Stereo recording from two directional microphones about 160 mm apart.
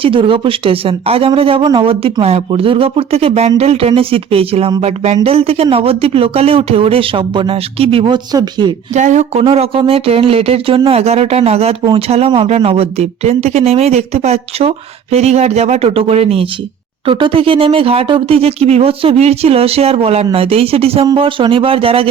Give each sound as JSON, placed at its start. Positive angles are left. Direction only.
{"t": 0.0, "sound": "speech", "side_deg": -35}
{"t": 8.9, "sound": "speech", "side_deg": -50}